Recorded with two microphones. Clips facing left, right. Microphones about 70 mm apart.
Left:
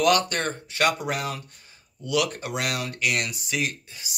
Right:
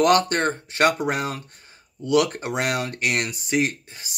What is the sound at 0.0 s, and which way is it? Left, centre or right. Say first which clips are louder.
Speech: right 4 dB; right.